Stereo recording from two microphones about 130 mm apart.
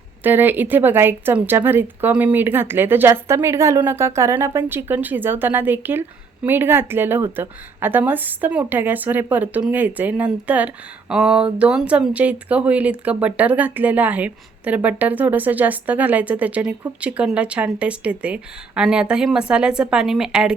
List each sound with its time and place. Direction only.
0.2 s a woman's voice: 15° right (ahead or behind)